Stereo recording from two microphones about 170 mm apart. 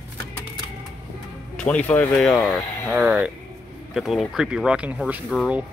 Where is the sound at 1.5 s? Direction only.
5° left (ahead or behind).